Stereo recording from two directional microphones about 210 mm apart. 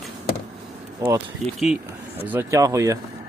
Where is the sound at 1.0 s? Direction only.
15° right (ahead or behind).